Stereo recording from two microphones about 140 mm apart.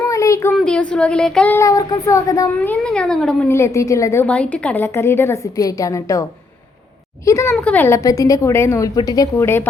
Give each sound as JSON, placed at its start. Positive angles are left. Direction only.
{"t": 0.0, "sound": "a sound", "side_deg": 20}
{"t": 0.5, "sound": "speech", "side_deg": 5}
{"t": 1.5, "sound": "a woman's voice", "side_deg": 25}
{"t": 2.6, "sound": "a child's voice", "side_deg": 5}
{"t": 3.5, "sound": "a woman's voice", "side_deg": 20}
{"t": 7.3, "sound": "a woman's voice", "side_deg": 20}
{"t": 7.5, "sound": "a woman's voice", "side_deg": 10}